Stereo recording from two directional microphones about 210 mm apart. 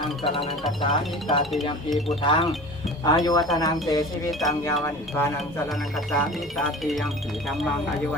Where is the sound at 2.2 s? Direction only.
25° left (ahead or behind).